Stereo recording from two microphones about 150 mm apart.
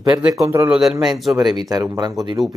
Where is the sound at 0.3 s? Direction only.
20° right (ahead or behind).